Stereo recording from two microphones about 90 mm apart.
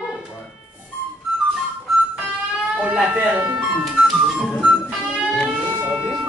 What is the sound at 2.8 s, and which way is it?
Speech, 15° right (ahead or behind).